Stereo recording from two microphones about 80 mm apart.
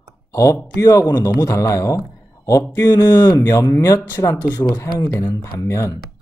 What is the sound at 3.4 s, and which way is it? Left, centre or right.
Speech, left.